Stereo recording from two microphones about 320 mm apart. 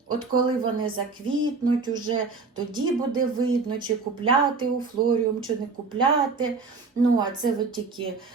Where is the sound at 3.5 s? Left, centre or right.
Centre.